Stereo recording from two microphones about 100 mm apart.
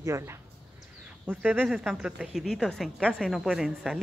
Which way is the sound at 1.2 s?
10° right (ahead or behind).